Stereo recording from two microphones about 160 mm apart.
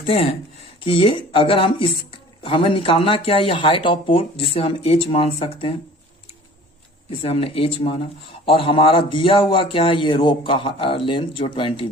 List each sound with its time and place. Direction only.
0.0 s speech: 35° left (ahead or behind)
7.2 s speech: 35° left (ahead or behind)